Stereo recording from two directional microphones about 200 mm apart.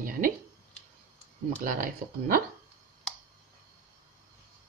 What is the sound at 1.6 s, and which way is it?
Speech, 45° right (ahead or behind).